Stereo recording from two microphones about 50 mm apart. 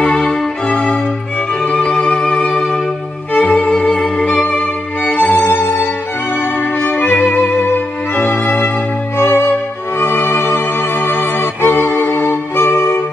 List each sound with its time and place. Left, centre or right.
0.0 s music: left